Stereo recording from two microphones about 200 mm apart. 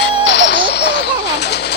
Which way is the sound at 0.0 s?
60° left (ahead or behind).